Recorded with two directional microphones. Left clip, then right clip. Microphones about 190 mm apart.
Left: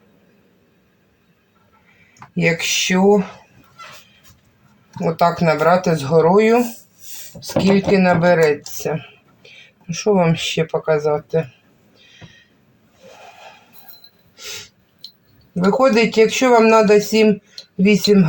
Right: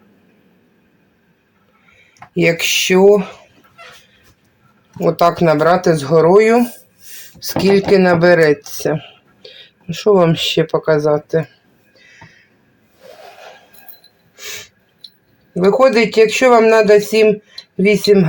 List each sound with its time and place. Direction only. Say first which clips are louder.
2.3 s speech: right 4 dB; 60° right (ahead or behind)
5.0 s speech: right 4 dB; 50° right (ahead or behind)
15.5 s speech: right 4 dB; 50° right (ahead or behind)